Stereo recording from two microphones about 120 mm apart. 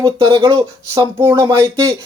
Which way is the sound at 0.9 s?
25° right (ahead or behind).